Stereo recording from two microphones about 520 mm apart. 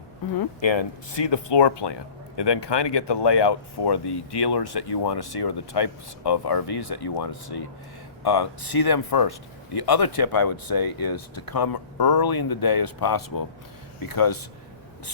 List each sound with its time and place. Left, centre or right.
0.3 s speech: left